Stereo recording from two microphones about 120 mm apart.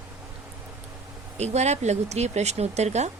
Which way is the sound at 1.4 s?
70° right (ahead or behind).